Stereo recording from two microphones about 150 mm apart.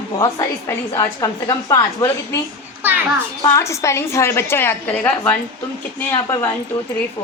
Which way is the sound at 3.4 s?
20° left (ahead or behind).